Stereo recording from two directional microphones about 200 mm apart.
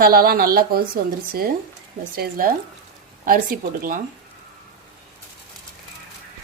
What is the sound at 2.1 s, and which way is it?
Speech, 45° right (ahead or behind).